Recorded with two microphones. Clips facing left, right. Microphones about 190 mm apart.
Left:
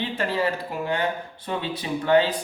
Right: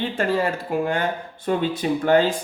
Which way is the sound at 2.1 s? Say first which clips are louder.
Right 1 dB; 45° right (ahead or behind).